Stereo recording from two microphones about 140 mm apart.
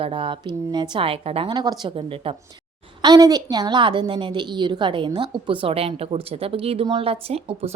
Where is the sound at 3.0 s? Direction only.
25° right (ahead or behind); by 7.7 s 45° right (ahead or behind).